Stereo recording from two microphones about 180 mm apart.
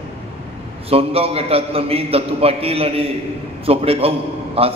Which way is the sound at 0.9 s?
35° right (ahead or behind).